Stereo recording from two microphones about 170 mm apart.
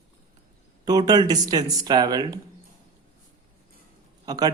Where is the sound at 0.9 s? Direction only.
20° right (ahead or behind).